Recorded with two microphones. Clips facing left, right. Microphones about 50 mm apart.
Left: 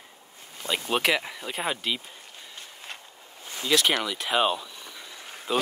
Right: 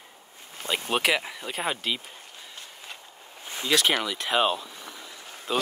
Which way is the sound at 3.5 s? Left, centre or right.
Centre.